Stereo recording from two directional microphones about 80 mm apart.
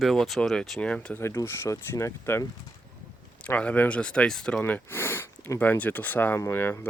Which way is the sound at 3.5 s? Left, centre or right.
Centre.